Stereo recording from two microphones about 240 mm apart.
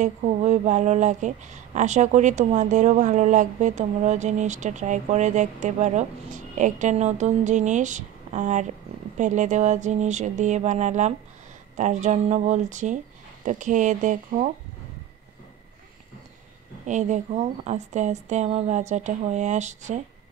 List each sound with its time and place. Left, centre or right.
0.0 s speech: right
16.8 s speech: right